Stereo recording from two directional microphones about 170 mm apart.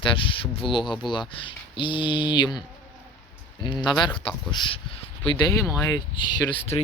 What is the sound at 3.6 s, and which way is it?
Speech, 25° left (ahead or behind).